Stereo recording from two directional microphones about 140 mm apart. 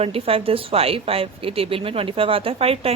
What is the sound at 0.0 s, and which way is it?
A woman's voice, 45° right (ahead or behind).